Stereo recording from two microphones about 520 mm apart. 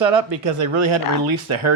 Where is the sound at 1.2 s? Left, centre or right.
Right.